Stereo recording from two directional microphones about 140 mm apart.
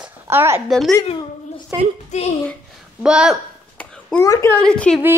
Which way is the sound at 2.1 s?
55° left (ahead or behind).